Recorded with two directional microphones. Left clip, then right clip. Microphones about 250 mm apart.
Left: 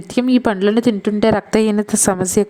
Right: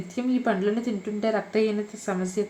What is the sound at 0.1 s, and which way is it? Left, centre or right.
A woman's voice, left.